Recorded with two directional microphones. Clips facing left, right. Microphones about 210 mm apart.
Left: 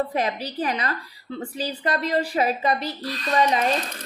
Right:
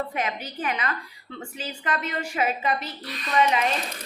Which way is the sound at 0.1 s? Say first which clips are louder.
Left 4 dB; 35° left (ahead or behind).